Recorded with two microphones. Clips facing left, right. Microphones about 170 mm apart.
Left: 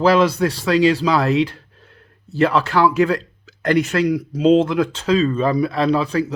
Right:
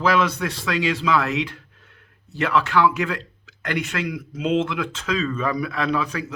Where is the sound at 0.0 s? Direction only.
35° left (ahead or behind).